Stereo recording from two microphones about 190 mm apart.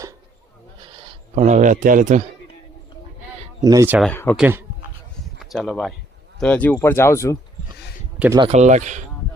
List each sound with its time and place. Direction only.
1.4 s a man's voice: 40° right (ahead or behind)
3.6 s speech: 15° right (ahead or behind)
3.9 s speech: 5° left (ahead or behind)
4.4 s speech: 10° right (ahead or behind); by 7.3 s 15° left (ahead or behind)
8.5 s a man's voice: 40° right (ahead or behind)